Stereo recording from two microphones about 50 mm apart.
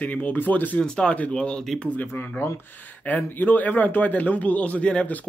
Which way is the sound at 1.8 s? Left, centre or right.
Left.